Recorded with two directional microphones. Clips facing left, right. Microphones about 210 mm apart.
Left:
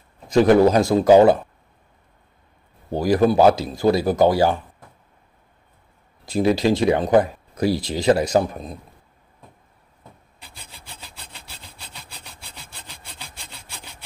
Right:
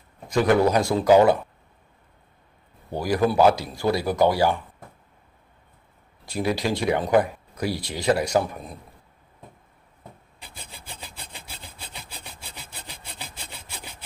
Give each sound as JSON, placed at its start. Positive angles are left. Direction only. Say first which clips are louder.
{"t": 0.3, "sound": "speech", "louder": "left 5 dB", "side_deg": 25}
{"t": 2.9, "sound": "speech", "louder": "left 5 dB", "side_deg": 25}
{"t": 6.2, "sound": "speech", "louder": "left 7 dB", "side_deg": 25}
{"t": 12.4, "sound": "sawing", "louder": "right 1 dB", "side_deg": -10}